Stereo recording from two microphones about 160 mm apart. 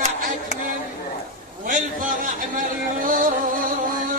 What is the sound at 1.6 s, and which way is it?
Speech, 55° right (ahead or behind).